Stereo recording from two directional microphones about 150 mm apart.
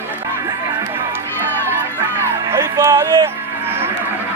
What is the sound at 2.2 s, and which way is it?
Music, 20° right (ahead or behind).